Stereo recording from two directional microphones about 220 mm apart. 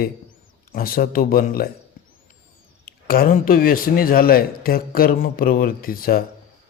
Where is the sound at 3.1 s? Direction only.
40° left (ahead or behind).